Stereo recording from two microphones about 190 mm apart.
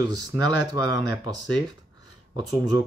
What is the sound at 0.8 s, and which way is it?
Speech, 20° right (ahead or behind).